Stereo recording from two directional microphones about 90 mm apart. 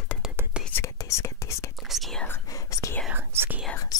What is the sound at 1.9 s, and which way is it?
Whispering, centre (ahead or behind).